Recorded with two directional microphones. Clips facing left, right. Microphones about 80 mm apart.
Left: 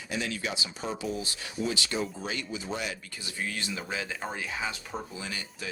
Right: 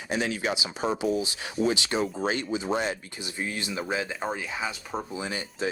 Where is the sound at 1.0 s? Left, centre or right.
Centre.